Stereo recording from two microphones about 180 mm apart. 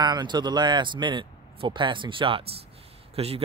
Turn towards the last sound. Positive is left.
turn(degrees=-35)  # may be behind; listen again after turning